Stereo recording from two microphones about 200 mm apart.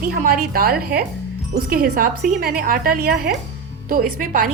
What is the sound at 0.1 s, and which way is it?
A woman's voice, 50° right (ahead or behind).